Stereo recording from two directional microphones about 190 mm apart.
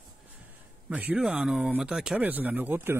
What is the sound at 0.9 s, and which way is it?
Speech, 10° right (ahead or behind).